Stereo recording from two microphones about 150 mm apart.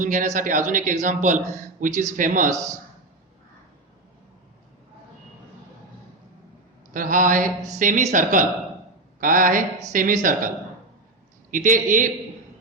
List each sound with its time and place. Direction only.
0.0 s speech: 60° right (ahead or behind)
1.8 s speech: 65° right (ahead or behind)
6.9 s speech: 60° right (ahead or behind)
11.5 s speech: 60° right (ahead or behind)